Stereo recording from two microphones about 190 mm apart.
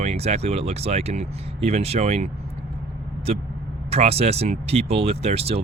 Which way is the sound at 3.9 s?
30° right (ahead or behind).